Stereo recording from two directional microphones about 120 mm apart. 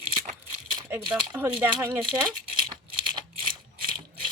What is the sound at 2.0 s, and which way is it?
Speech, 35° right (ahead or behind).